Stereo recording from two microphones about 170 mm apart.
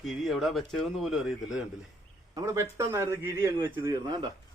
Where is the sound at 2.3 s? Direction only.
20° right (ahead or behind).